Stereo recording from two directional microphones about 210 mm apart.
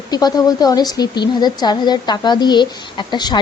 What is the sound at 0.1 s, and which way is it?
A woman's voice, 20° left (ahead or behind).